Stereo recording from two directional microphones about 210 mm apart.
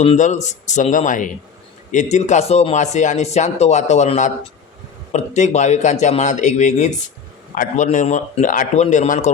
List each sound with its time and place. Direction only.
0.0 s speech: 30° left (ahead or behind)